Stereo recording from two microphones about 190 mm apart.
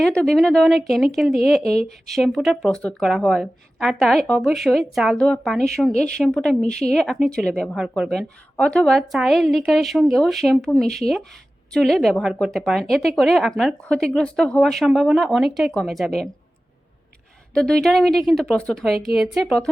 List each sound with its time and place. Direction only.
0.0 s speech: 5° left (ahead or behind)
17.5 s speech: 5° left (ahead or behind)